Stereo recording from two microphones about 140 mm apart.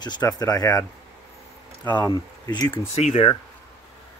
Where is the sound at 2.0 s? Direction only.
25° left (ahead or behind).